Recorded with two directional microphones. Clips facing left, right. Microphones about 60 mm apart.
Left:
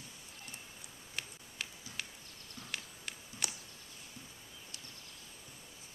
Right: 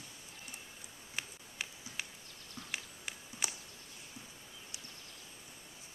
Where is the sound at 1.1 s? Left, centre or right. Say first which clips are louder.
Right 1 dB; centre.